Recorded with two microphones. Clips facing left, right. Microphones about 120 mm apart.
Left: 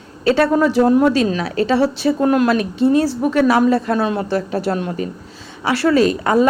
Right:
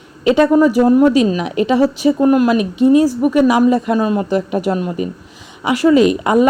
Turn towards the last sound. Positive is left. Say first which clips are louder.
# right 3 dB
turn(degrees=-15)  # may be behind; listen again after turning